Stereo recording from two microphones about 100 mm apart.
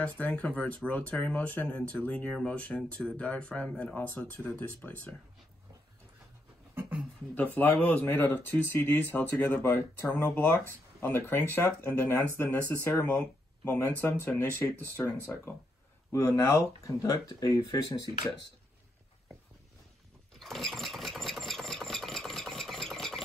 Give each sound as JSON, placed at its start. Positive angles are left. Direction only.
{"t": 0.2, "sound": "speech", "side_deg": 15}
{"t": 6.7, "sound": "a sound", "side_deg": -20}
{"t": 7.3, "sound": "speech", "side_deg": 15}
{"t": 16.1, "sound": "speech", "side_deg": 30}
{"t": 20.3, "sound": "engine", "side_deg": 0}